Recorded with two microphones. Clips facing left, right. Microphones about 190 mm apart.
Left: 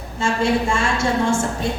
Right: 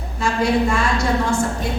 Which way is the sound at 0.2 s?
25° left (ahead or behind).